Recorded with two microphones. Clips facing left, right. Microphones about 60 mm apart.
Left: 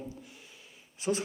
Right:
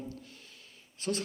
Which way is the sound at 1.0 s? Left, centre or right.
Centre.